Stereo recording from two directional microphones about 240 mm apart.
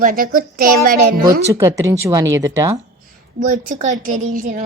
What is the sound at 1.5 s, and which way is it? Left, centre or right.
Speech, centre.